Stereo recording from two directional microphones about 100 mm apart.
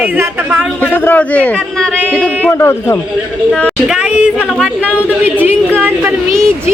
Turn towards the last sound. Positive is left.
turn(degrees=-20)  # may be behind; listen again after turning